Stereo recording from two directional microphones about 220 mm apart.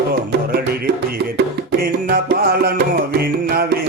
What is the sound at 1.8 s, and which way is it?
Music, 40° right (ahead or behind).